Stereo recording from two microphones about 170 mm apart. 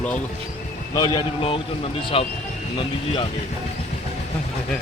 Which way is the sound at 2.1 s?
35° left (ahead or behind).